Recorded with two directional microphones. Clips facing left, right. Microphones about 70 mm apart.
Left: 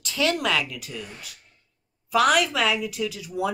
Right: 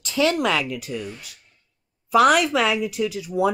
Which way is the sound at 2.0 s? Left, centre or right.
Right.